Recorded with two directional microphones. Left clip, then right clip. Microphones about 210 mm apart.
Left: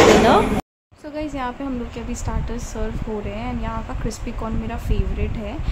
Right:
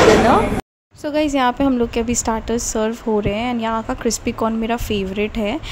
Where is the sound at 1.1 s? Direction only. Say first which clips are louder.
Right 10 dB; 40° right (ahead or behind).